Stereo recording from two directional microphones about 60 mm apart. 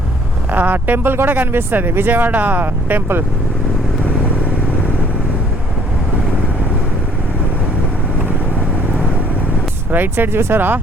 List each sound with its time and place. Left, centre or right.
0.5 s speech: right
9.9 s speech: right